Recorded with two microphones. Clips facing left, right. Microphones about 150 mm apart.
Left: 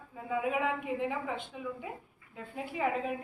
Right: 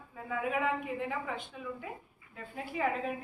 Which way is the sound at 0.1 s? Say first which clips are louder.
Left 2 dB; 15° left (ahead or behind).